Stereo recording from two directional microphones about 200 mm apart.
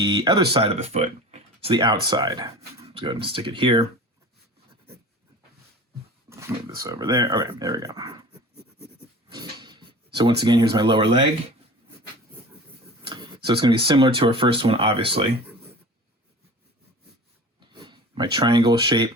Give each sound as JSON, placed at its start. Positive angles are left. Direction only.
{"t": 0.0, "sound": "a sound", "side_deg": -20}
{"t": 0.5, "sound": "speech", "side_deg": -30}
{"t": 6.3, "sound": "speech", "side_deg": -15}
{"t": 9.3, "sound": "speech", "side_deg": -20}
{"t": 13.0, "sound": "speech", "side_deg": -25}
{"t": 17.6, "sound": "a sound", "side_deg": -25}